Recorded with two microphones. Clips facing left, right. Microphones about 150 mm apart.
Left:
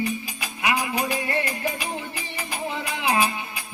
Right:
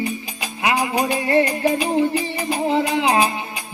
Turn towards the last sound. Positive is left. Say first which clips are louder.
# right 6 dB
turn(degrees=-30)  # may be behind; listen again after turning